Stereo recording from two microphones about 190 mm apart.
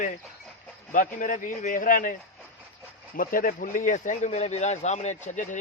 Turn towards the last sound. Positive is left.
turn(degrees=40)  # may be behind; listen again after turning